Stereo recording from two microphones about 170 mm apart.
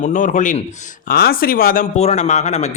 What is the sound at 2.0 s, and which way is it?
Speech, 40° left (ahead or behind).